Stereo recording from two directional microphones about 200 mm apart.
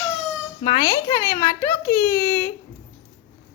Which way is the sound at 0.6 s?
25° left (ahead or behind).